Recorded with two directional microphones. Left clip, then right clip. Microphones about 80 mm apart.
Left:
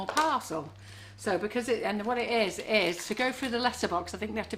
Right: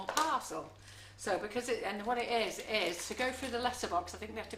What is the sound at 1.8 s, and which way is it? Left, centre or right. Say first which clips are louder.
A woman's voice: left 5 dB; left.